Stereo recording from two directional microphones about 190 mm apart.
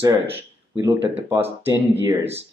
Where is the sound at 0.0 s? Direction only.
15° right (ahead or behind).